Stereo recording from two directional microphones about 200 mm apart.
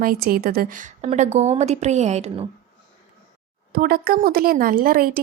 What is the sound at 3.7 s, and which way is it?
A woman's voice, 50° right (ahead or behind).